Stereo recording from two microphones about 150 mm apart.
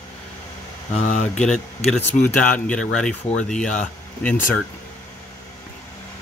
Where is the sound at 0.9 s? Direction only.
55° left (ahead or behind).